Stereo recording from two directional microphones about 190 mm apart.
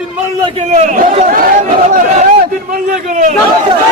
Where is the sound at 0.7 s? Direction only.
40° right (ahead or behind).